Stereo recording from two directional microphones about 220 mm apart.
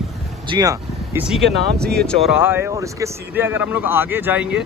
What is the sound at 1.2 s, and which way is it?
Speech, centre (ahead or behind).